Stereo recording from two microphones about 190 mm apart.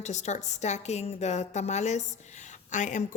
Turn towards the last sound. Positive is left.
turn(degrees=40)  # may be behind; listen again after turning